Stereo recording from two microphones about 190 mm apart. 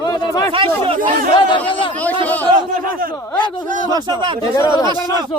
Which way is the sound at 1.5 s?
25° left (ahead or behind).